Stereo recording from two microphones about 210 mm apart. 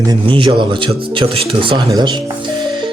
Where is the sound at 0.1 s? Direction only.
25° right (ahead or behind).